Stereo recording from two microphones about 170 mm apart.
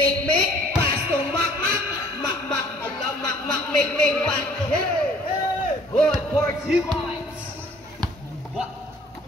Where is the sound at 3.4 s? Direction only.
5° left (ahead or behind).